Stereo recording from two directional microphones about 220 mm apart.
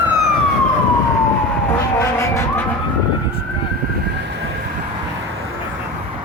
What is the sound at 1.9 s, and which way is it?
Vehicle, 10° left (ahead or behind).